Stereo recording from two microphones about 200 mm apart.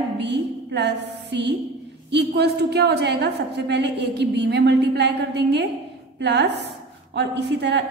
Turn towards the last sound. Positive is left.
turn(degrees=-60)  # may be behind; listen again after turning